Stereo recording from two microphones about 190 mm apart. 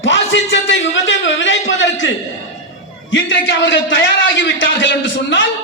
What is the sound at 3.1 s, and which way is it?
A man's voice, 70° left (ahead or behind).